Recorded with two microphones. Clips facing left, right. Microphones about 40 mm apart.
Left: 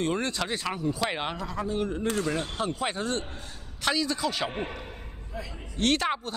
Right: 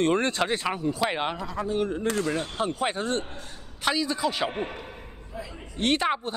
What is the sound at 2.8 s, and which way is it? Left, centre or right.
Speech, right.